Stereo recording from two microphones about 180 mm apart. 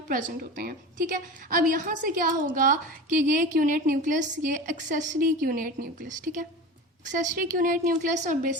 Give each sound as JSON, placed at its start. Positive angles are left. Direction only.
{"t": 0.1, "sound": "a woman's voice", "side_deg": -50}